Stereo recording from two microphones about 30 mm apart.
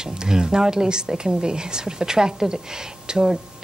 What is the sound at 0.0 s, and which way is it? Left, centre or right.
A woman's voice, right.